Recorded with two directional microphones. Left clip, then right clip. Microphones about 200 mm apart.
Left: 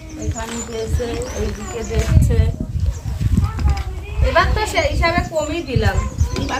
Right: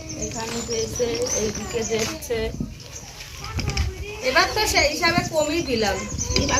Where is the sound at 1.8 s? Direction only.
50° left (ahead or behind).